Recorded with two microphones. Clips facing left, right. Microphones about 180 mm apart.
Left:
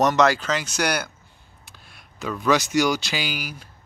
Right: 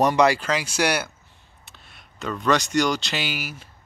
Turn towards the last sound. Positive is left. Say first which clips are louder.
# even
turn(degrees=-5)  # may be behind; listen again after turning